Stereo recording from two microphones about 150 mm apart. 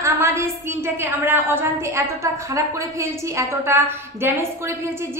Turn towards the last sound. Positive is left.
turn(degrees=-15)  # may be behind; listen again after turning